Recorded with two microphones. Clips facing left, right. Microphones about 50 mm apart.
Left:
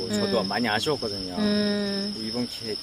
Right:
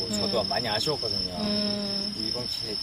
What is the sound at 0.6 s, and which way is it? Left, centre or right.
Speech, left.